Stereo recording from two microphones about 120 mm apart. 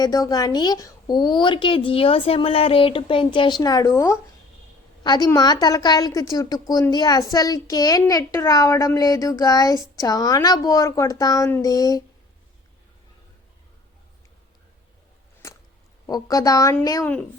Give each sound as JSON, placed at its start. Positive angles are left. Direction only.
{"t": 0.0, "sound": "a woman's voice", "side_deg": 30}
{"t": 5.0, "sound": "a woman's voice", "side_deg": 35}
{"t": 16.0, "sound": "a woman's voice", "side_deg": 30}